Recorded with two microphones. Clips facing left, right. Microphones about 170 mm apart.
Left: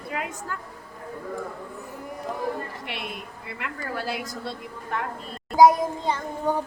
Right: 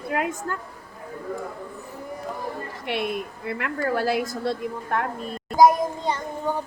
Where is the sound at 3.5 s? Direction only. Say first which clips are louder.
Right 8 dB; 50° right (ahead or behind).